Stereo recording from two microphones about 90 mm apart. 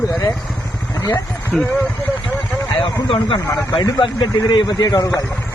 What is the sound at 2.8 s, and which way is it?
Speech, 80° left.